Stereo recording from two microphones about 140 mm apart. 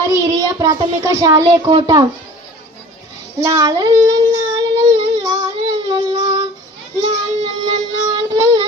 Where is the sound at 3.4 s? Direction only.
25° right (ahead or behind).